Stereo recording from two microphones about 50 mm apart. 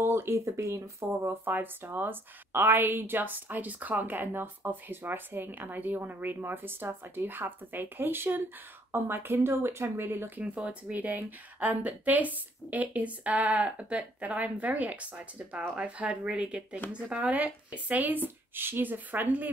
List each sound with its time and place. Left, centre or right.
0.0 s speech: right
1.2 s a woman's voice: right
10.4 s a woman's voice: right